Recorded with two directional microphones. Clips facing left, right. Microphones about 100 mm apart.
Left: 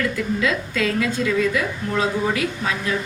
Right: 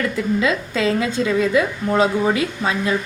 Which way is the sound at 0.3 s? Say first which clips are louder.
Right 2 dB; 25° right (ahead or behind).